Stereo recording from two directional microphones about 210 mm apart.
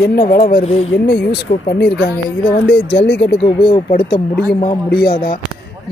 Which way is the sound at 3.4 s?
20° left (ahead or behind).